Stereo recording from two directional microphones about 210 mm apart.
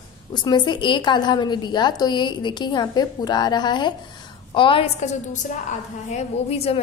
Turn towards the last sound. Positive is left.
turn(degrees=30)  # may be behind; listen again after turning